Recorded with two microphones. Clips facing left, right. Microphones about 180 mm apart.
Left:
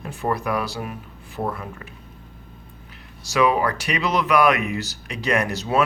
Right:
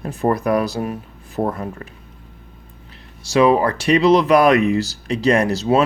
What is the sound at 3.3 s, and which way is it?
Speech, 30° right (ahead or behind).